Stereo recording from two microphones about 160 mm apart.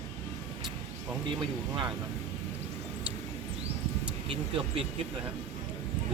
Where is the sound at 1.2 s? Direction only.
30° right (ahead or behind).